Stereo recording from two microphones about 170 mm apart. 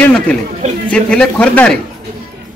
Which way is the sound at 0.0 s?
5° left (ahead or behind).